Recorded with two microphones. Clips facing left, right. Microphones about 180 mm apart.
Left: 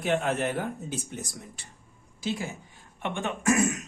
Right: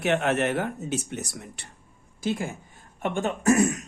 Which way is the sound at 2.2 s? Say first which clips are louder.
Right 3 dB; 50° right (ahead or behind).